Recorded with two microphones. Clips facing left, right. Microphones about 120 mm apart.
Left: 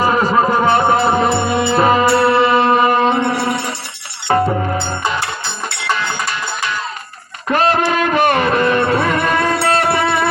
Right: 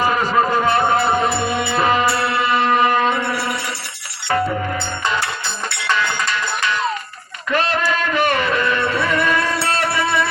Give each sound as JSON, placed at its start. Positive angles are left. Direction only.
{"t": 0.0, "sound": "music", "side_deg": 40}
{"t": 3.3, "sound": "music", "side_deg": 55}
{"t": 7.4, "sound": "music", "side_deg": 45}